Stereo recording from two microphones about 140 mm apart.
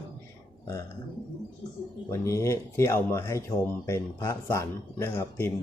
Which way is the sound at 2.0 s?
20° left (ahead or behind).